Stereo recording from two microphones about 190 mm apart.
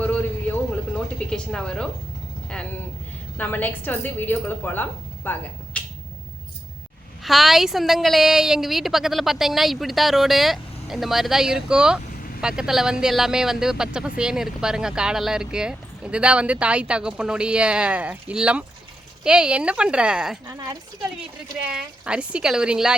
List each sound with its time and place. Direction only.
1.3 s a woman's voice: 5° left (ahead or behind)
3.3 s a woman's voice: 10° left (ahead or behind)
7.2 s speech: centre (ahead or behind)
20.5 s speech: 20° right (ahead or behind)
21.7 s speech: 5° right (ahead or behind)